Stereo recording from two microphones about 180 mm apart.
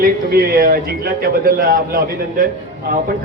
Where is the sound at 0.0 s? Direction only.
55° right (ahead or behind).